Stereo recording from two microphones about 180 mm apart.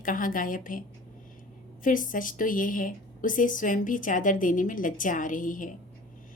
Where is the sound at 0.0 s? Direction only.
50° left (ahead or behind).